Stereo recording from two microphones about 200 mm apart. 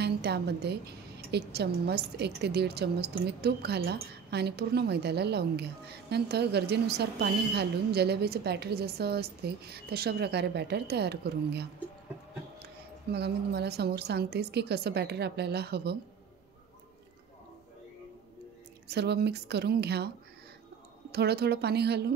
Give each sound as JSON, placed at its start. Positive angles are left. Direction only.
{"t": 0.0, "sound": "a woman's voice", "side_deg": -55}
{"t": 13.1, "sound": "a woman's voice", "side_deg": -55}
{"t": 18.9, "sound": "a woman's voice", "side_deg": -55}
{"t": 21.1, "sound": "a woman's voice", "side_deg": -55}